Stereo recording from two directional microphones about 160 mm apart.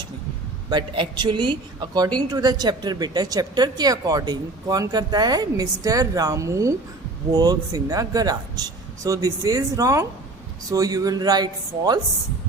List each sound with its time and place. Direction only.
0.7 s a woman's voice: 30° right (ahead or behind)